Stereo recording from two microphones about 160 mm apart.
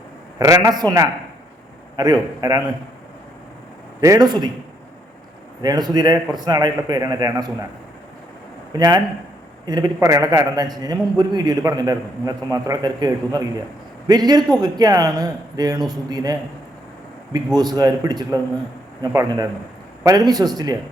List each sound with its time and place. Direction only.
0.3 s a man's voice: 20° right (ahead or behind)
4.0 s a man's voice: 25° right (ahead or behind)
5.6 s a man's voice: 25° right (ahead or behind)
8.7 s a man's voice: 25° right (ahead or behind)